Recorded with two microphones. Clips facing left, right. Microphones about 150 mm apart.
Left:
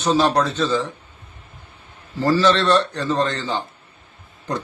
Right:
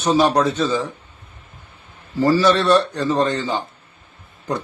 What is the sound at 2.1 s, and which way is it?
Speech, 10° right (ahead or behind).